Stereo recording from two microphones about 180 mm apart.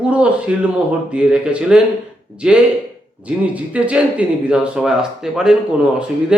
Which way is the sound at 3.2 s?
10° right (ahead or behind).